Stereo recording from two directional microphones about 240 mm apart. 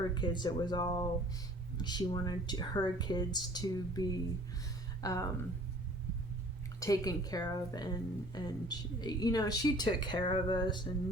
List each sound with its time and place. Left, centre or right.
0.0 s a woman's voice: centre
6.7 s a woman's voice: centre